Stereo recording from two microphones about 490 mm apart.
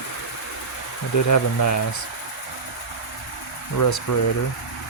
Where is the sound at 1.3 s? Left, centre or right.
Left.